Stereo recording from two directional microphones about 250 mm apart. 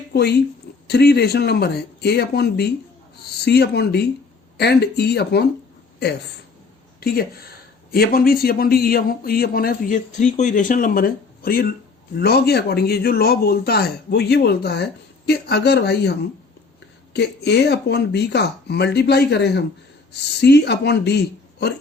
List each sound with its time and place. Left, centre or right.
0.1 s a man's voice: left
7.0 s a man's voice: left
17.2 s a man's voice: left